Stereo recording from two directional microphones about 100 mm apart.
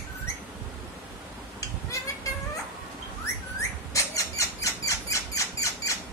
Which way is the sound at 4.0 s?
30° left (ahead or behind).